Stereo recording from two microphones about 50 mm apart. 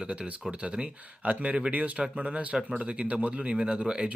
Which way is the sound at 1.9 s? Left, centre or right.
Centre.